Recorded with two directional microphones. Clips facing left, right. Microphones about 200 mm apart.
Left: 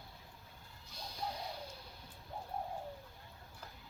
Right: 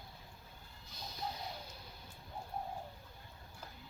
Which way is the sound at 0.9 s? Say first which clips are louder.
Even; 30° left (ahead or behind).